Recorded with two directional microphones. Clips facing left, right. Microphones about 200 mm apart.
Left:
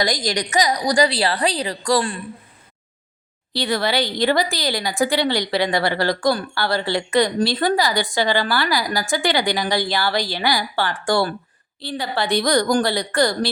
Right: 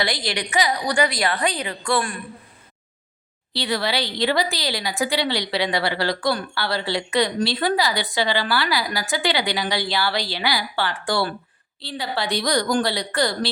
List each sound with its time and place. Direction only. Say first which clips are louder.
0.0 s a woman's voice: left 3 dB; 40° left (ahead or behind)
3.5 s a woman's voice: left 3 dB; 45° left (ahead or behind)